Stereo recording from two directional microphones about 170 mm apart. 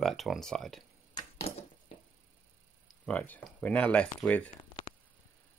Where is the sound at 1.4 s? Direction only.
35° left (ahead or behind).